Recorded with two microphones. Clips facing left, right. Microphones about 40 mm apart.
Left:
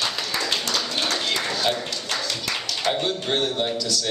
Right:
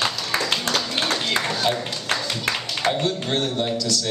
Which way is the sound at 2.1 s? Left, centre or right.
Right.